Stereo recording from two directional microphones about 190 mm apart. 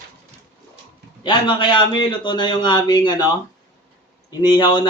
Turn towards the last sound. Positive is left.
turn(degrees=25)  # may be behind; listen again after turning